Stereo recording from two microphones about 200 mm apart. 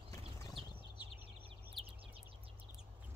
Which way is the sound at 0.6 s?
25° right (ahead or behind).